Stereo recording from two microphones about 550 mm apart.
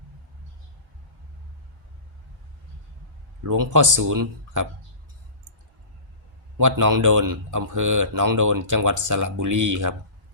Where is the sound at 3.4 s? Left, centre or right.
Right.